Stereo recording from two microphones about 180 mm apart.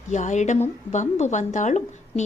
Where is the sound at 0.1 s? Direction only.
40° left (ahead or behind).